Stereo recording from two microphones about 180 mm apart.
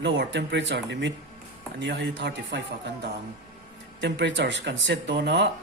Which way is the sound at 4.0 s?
80° right.